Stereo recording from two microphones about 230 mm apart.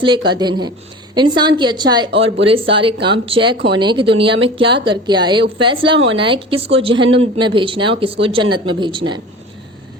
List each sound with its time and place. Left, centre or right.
0.0 s speech: right